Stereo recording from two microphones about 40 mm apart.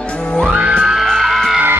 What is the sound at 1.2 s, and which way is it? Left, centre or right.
Music, centre.